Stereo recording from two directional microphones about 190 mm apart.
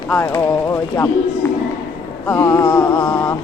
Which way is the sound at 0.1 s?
10° left (ahead or behind).